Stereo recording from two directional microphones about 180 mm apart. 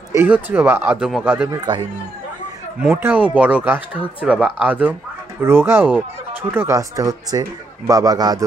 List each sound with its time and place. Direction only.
0.1 s a man's voice: 10° right (ahead or behind)
1.5 s a man's voice: 25° right (ahead or behind)
2.8 s a man's voice: 10° right (ahead or behind)